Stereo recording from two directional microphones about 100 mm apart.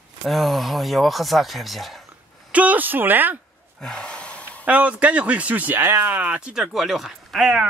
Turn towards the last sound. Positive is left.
turn(degrees=-5)  # may be behind; listen again after turning